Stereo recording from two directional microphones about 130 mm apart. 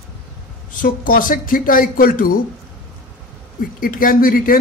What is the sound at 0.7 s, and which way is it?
A man's voice, 90° left.